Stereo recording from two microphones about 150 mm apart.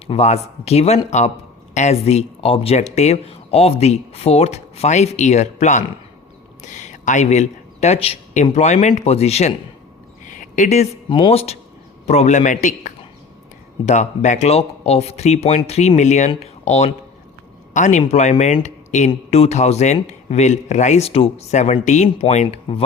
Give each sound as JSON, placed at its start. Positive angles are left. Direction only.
{"t": 0.1, "sound": "speech", "side_deg": 45}
{"t": 10.2, "sound": "a sound", "side_deg": 60}
{"t": 11.1, "sound": "a man's voice", "side_deg": 35}